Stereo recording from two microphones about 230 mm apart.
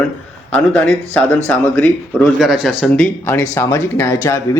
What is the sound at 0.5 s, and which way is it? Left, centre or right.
Speech, centre.